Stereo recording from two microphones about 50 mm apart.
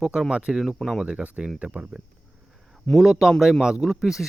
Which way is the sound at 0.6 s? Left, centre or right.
Centre.